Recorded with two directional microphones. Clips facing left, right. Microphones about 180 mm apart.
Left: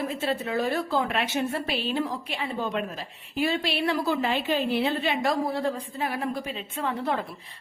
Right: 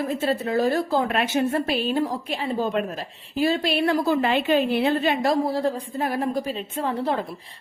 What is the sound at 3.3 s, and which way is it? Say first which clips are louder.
Speech: right 4 dB; 40° right (ahead or behind).